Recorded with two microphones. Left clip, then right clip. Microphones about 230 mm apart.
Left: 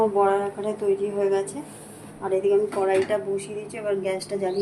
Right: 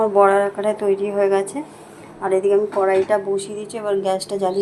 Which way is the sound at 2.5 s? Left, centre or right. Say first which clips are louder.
Right 3 dB; centre.